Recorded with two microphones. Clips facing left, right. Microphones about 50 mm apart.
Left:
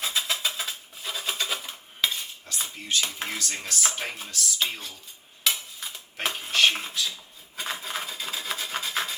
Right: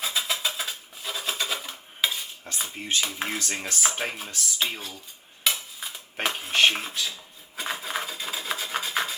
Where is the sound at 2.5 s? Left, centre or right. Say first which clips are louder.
Right 2 dB; right.